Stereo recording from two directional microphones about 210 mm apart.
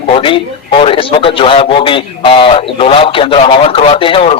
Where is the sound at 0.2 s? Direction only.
25° left (ahead or behind).